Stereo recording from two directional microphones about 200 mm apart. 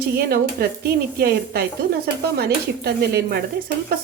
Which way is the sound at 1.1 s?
50° right (ahead or behind).